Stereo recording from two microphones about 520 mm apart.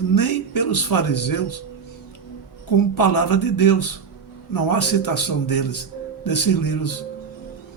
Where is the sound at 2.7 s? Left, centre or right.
Left.